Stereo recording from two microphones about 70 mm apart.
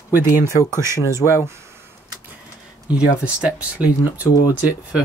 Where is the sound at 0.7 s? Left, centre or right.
Right.